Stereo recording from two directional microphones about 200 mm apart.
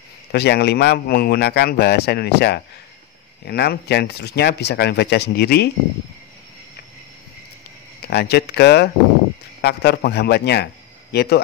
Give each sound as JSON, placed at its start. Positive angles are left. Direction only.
{"t": 0.3, "sound": "a man's voice", "side_deg": 55}
{"t": 8.0, "sound": "a man's voice", "side_deg": 55}